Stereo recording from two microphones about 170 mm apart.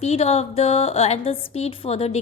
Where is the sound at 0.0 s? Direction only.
40° left (ahead or behind).